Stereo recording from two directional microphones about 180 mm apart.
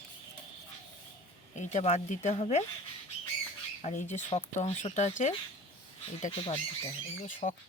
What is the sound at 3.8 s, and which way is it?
Speech, 40° left (ahead or behind).